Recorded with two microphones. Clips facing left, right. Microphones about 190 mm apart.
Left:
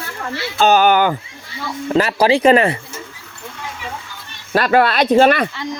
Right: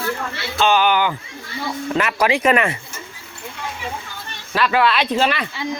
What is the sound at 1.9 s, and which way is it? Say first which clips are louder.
Speech: left 5 dB; 30° left (ahead or behind).